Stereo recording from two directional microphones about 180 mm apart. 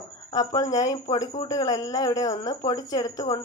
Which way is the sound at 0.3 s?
20° left (ahead or behind).